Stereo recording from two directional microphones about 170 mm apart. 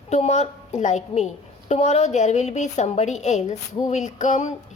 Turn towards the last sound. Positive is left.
turn(degrees=45)  # may be behind; listen again after turning